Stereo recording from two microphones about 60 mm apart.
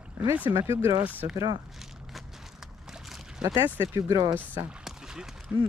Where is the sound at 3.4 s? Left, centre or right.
Right.